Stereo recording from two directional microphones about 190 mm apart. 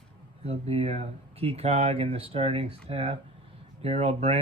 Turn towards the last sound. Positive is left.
turn(degrees=-35)  # may be behind; listen again after turning